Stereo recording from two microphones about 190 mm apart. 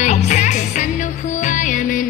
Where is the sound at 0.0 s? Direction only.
40° left (ahead or behind).